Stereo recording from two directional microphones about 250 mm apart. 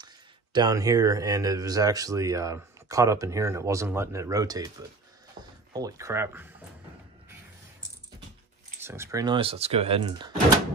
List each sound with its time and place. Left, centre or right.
0.0 s speech: centre
5.7 s speech: centre
8.8 s speech: centre